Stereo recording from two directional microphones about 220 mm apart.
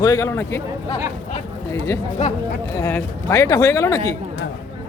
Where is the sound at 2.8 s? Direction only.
10° left (ahead or behind).